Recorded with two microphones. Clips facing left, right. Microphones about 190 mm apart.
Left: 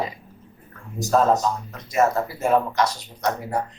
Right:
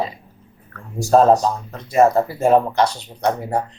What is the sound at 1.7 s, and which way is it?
Speech, 30° right (ahead or behind).